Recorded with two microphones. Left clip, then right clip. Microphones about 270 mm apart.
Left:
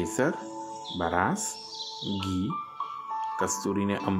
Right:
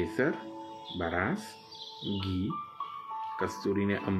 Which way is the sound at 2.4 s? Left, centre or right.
Left.